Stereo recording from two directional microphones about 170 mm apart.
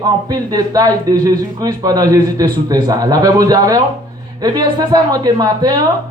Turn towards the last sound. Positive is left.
turn(degrees=-20)  # may be behind; listen again after turning